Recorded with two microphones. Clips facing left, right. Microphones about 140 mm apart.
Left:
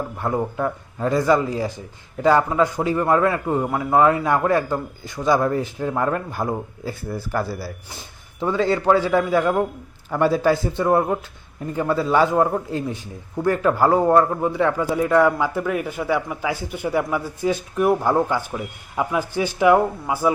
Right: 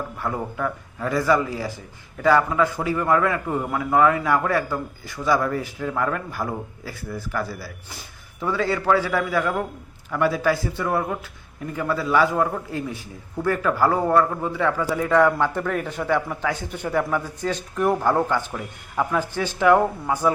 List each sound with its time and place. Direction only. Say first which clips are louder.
0.2 s a man's voice: left 4 dB; 25° left (ahead or behind)